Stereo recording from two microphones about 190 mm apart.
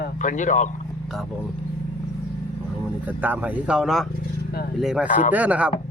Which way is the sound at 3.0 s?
10° right (ahead or behind).